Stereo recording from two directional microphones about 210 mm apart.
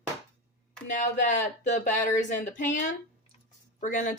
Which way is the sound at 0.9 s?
35° left (ahead or behind).